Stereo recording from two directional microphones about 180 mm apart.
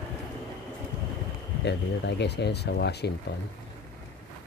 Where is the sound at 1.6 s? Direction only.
70° left (ahead or behind).